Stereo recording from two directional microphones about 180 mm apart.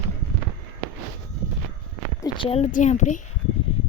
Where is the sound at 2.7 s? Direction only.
45° left (ahead or behind).